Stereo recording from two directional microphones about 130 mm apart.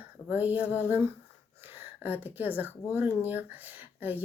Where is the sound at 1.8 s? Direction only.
15° right (ahead or behind).